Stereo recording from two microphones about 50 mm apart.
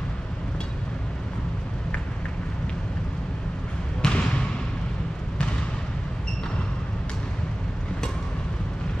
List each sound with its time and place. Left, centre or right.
4.0 s trickle: left